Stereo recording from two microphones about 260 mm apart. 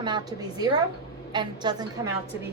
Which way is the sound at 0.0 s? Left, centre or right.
Centre.